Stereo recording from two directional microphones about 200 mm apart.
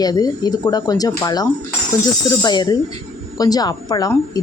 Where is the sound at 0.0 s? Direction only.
20° left (ahead or behind).